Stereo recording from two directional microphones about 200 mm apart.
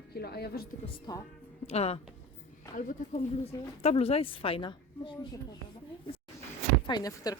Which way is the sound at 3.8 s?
30° left (ahead or behind).